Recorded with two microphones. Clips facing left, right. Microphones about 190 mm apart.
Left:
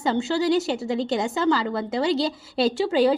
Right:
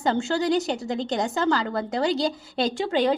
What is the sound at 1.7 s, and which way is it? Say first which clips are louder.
Speech: left 1 dB; 40° right (ahead or behind).